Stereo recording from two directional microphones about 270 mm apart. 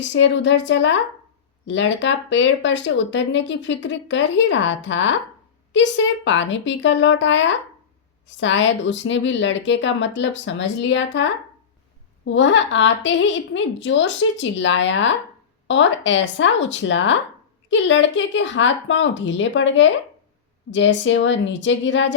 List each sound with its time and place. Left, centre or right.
0.0 s speech: left